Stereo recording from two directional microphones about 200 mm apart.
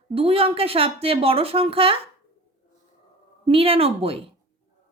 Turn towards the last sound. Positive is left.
turn(degrees=-30)  # may be behind; listen again after turning